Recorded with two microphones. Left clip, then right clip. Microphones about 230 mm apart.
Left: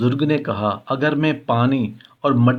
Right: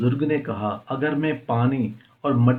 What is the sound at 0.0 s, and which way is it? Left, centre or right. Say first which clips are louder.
Speech: left 4 dB; left.